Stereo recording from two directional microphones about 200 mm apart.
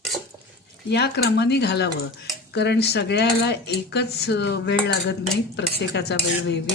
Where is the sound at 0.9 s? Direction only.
55° left (ahead or behind).